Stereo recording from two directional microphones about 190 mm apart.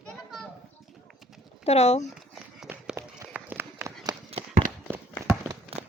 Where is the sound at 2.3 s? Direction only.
5° right (ahead or behind).